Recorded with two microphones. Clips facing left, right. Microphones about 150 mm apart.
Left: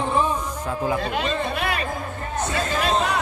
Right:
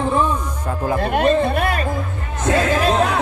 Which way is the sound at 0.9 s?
55° right (ahead or behind).